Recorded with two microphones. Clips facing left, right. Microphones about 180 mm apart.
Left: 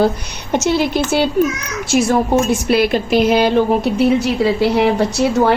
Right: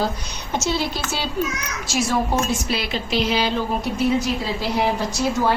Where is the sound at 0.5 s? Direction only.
60° left (ahead or behind).